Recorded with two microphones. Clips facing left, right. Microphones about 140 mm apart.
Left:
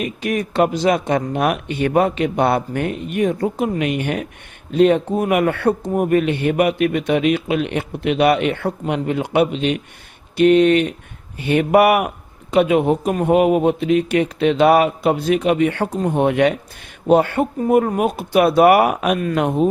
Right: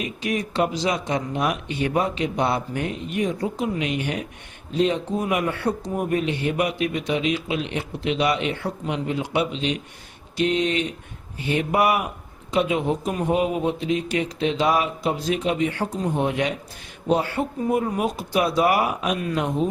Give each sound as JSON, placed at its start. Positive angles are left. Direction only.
{"t": 0.0, "sound": "a man's voice", "side_deg": 55}